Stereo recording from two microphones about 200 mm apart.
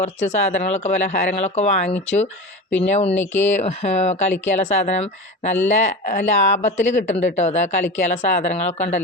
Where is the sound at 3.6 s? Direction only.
35° left (ahead or behind).